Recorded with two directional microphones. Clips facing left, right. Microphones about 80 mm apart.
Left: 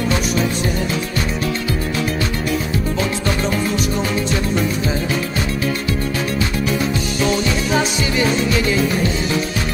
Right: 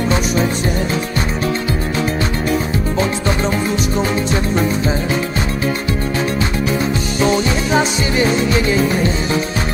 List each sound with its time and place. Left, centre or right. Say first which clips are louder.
7.2 s music: right 4 dB; right